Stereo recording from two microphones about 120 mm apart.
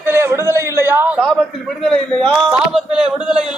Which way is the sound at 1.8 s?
5° left (ahead or behind).